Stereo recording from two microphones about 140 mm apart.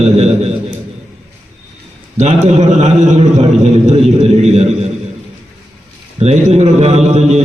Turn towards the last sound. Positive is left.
turn(degrees=-50)  # may be behind; listen again after turning